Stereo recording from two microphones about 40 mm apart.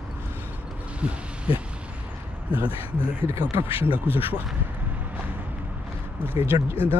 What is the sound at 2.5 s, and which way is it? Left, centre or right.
Speech, right.